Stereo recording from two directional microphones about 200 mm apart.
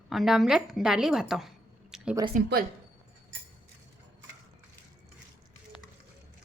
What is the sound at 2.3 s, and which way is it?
Speech, 45° right (ahead or behind).